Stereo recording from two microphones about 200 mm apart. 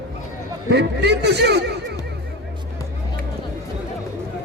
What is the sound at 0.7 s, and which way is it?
Speech, 55° right (ahead or behind).